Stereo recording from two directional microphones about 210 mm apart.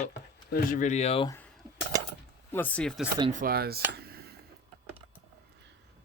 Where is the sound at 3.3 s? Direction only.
45° right (ahead or behind).